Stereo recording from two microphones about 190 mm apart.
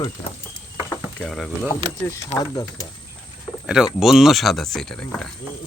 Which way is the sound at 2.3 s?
20° left (ahead or behind).